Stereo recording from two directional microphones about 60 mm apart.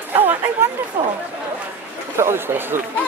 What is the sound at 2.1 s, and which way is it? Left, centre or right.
Speech, right.